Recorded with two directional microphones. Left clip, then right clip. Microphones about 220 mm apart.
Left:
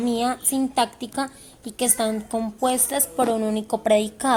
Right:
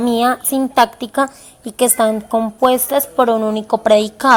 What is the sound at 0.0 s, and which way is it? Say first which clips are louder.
A woman's voice: right 9 dB; 20° right (ahead or behind).